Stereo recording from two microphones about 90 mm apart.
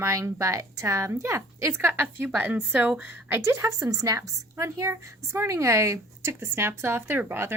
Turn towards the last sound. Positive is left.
turn(degrees=-25)  # may be behind; listen again after turning